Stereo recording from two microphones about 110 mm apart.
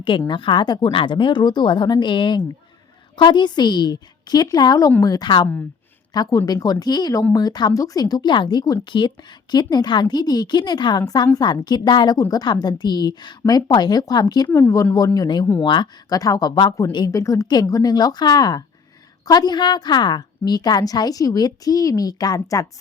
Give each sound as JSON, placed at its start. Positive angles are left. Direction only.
{"t": 0.3, "sound": "a woman's voice", "side_deg": 45}
{"t": 14.4, "sound": "a woman's voice", "side_deg": 25}